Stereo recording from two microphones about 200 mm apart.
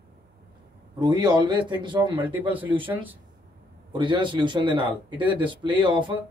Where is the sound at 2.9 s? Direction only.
10° right (ahead or behind).